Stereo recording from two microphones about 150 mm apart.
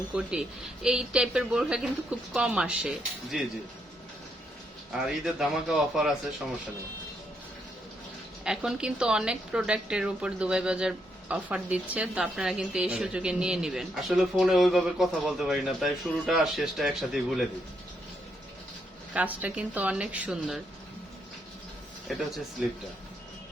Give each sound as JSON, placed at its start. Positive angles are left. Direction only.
{"t": 0.1, "sound": "a woman's voice", "side_deg": -5}
{"t": 5.0, "sound": "a woman's voice", "side_deg": 0}
{"t": 8.4, "sound": "a woman's voice", "side_deg": -5}
{"t": 19.1, "sound": "speech", "side_deg": -10}
{"t": 22.0, "sound": "speech", "side_deg": 0}